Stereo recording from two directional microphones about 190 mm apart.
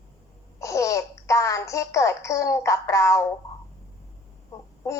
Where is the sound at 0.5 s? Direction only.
15° left (ahead or behind).